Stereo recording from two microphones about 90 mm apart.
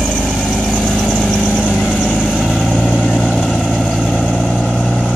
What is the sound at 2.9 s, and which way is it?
Vehicle, 10° right (ahead or behind).